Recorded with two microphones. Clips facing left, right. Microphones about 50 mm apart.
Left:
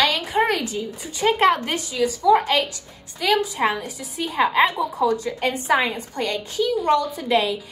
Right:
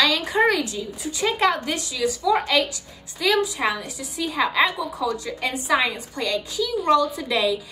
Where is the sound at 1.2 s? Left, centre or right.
Left.